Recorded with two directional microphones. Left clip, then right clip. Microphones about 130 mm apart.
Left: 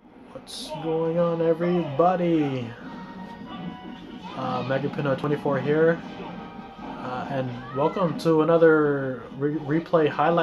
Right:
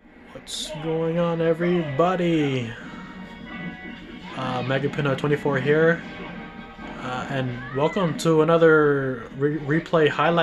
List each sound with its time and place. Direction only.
1.1 s speech: 40° right (ahead or behind)
4.4 s speech: 40° right (ahead or behind)
7.0 s speech: 40° right (ahead or behind)